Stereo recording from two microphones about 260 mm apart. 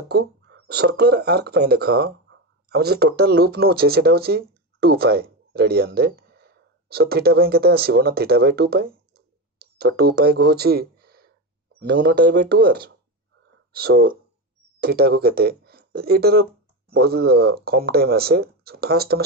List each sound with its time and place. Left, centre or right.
0.1 s speech: right